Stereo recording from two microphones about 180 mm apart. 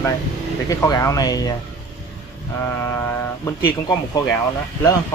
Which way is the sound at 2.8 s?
15° left (ahead or behind).